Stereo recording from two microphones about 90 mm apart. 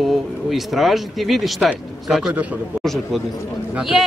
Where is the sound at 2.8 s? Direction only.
Centre (ahead or behind).